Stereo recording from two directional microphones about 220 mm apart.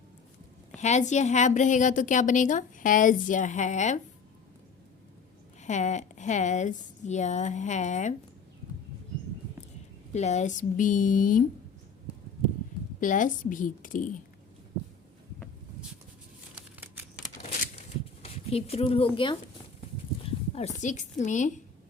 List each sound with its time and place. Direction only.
0.8 s a woman's voice: 30° left (ahead or behind)
5.6 s a woman's voice: 30° left (ahead or behind)
10.1 s a woman's voice: 30° left (ahead or behind)
13.0 s a woman's voice: 35° left (ahead or behind)
16.6 s a sound: 10° right (ahead or behind)
18.2 s speech: 25° left (ahead or behind)